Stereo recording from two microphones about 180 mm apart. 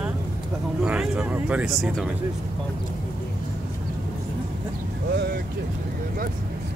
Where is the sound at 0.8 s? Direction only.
5° right (ahead or behind).